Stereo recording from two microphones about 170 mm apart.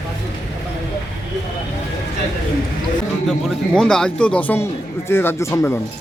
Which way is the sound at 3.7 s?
5° left (ahead or behind).